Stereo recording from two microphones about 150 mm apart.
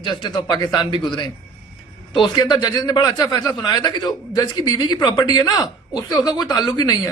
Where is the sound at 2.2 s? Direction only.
25° left (ahead or behind).